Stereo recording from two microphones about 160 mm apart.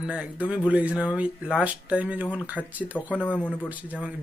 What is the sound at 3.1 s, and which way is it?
Speech, 10° left (ahead or behind).